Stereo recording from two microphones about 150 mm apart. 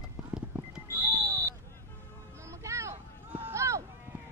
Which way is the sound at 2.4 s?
20° right (ahead or behind).